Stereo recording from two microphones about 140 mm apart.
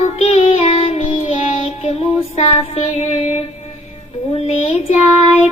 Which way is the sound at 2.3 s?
50° left (ahead or behind).